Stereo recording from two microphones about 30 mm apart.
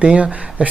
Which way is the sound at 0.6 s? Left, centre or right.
Right.